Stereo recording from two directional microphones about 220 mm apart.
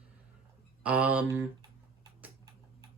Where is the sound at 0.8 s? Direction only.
5° right (ahead or behind).